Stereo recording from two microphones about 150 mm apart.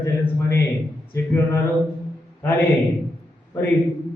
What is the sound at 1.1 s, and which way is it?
Speech, 15° left (ahead or behind).